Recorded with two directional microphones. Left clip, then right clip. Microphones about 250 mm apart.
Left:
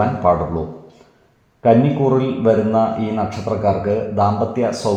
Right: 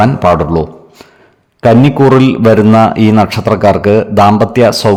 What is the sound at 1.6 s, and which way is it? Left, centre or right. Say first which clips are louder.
A man's voice: right 7 dB; right.